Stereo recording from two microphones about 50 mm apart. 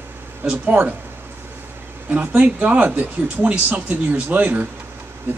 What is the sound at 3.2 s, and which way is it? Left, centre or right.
Speech, right.